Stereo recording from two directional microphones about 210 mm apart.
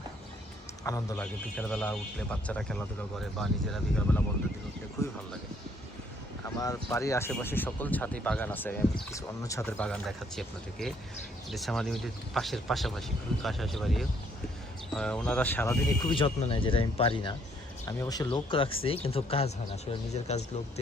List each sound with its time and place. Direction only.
0.9 s a man's voice: 15° left (ahead or behind)
5.0 s speech: 15° left (ahead or behind)
6.4 s a man's voice: 15° left (ahead or behind)
16.0 s speech: 25° left (ahead or behind)